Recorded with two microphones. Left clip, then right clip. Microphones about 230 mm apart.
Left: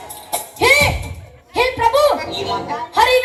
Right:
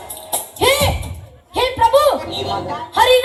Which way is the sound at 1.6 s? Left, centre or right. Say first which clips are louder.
Right 1 dB; right.